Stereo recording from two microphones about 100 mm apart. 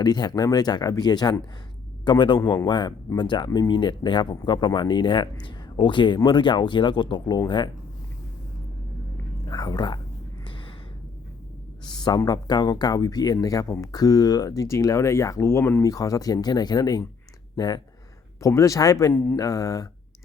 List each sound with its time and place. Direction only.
0.0 s speech: 45° left (ahead or behind)
9.5 s speech: 40° left (ahead or behind)
10.4 s a sound: 55° left (ahead or behind)
11.9 s speech: 45° left (ahead or behind); by 15.8 s 25° left (ahead or behind)
15.8 s speech: 35° left (ahead or behind)
18.3 s speech: 35° left (ahead or behind)
19.1 s mantra: 20° left (ahead or behind)
19.4 s speech: 35° left (ahead or behind)